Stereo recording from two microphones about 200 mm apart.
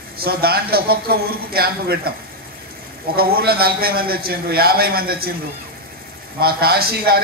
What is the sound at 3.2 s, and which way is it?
A man's voice, 50° right (ahead or behind).